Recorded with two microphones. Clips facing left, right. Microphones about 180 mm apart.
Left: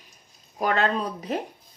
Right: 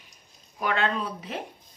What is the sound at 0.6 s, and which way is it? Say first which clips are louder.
Speech: left 3 dB; 40° left (ahead or behind).